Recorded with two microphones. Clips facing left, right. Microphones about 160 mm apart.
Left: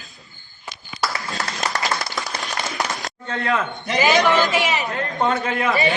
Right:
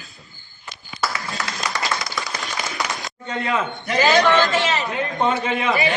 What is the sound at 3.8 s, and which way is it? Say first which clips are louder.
A man's voice: right 1 dB; 20° left (ahead or behind).